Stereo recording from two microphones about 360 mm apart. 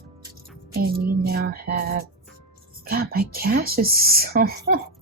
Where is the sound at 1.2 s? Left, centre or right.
Right.